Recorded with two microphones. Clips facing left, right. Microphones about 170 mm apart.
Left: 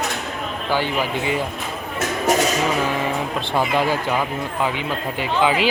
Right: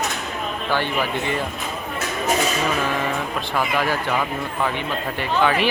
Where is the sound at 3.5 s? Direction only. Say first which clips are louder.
Left 3 dB; 25° left (ahead or behind).